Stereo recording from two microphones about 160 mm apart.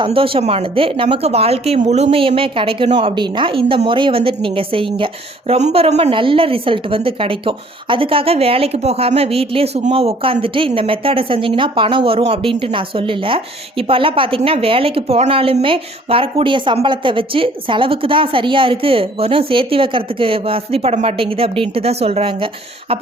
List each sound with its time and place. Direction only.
0.0 s a woman's voice: 35° right (ahead or behind)